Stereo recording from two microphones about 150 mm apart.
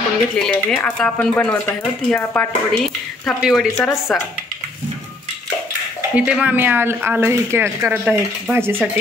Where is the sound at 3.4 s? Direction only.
Centre (ahead or behind).